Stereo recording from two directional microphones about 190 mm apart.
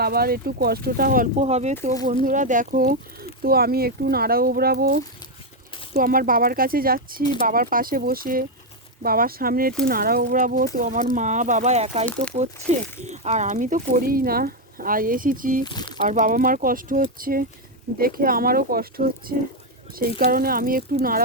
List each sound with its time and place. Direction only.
0.0 s speech: 55° right (ahead or behind)
15.6 s speech: 25° left (ahead or behind)
16.0 s speech: 45° right (ahead or behind)